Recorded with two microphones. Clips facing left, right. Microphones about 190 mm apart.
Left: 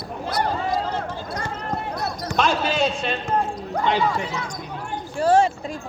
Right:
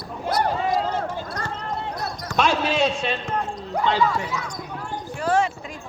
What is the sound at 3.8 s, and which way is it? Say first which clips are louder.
Speech: even; 20° left (ahead or behind).